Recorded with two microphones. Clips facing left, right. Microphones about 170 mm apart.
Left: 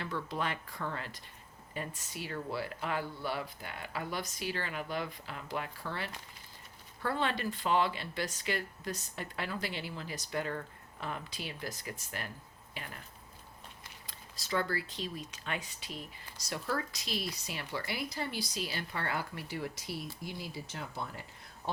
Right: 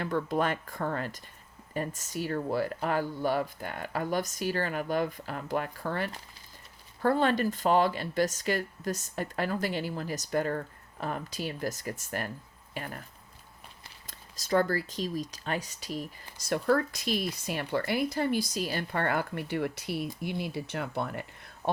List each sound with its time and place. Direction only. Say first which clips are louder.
0.0 s speech: right 8 dB; 50° right (ahead or behind)
14.1 s speech: right 8 dB; 45° right (ahead or behind); by 21.7 s 65° right (ahead or behind)